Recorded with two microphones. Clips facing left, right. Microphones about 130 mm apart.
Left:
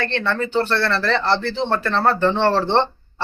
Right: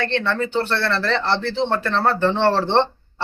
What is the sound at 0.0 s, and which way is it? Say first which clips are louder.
Speech: right 1 dB; 20° right (ahead or behind).